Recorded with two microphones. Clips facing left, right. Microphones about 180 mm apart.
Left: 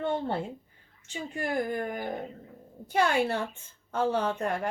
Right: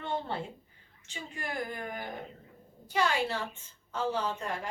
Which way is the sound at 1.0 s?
50° left (ahead or behind).